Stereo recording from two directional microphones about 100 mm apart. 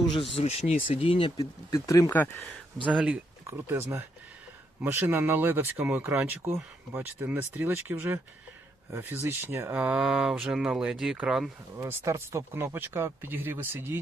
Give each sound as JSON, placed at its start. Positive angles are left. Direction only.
{"t": 0.1, "sound": "speech", "side_deg": 75}
{"t": 1.4, "sound": "speech", "side_deg": 35}
{"t": 2.0, "sound": "speech", "side_deg": 20}
{"t": 2.8, "sound": "speech", "side_deg": -10}
{"t": 3.4, "sound": "speech", "side_deg": -25}
{"t": 9.7, "sound": "speech", "side_deg": -10}
{"t": 11.8, "sound": "speech", "side_deg": -30}